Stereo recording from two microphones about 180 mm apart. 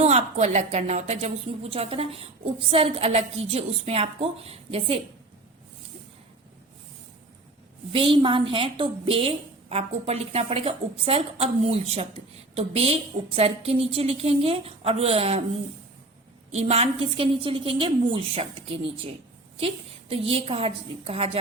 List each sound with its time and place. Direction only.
0.0 s a woman's voice: 35° right (ahead or behind)
7.9 s a woman's voice: 30° right (ahead or behind)
16.5 s a woman's voice: 35° right (ahead or behind)